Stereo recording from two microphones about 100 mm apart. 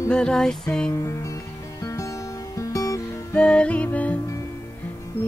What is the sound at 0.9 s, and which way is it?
Music, 30° left (ahead or behind).